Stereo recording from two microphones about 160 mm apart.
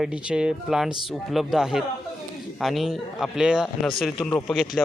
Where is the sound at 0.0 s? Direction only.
5° right (ahead or behind).